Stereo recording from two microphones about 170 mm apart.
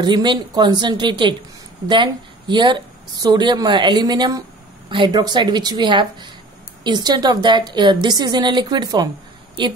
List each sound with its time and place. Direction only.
0.0 s a woman's voice: 25° right (ahead or behind)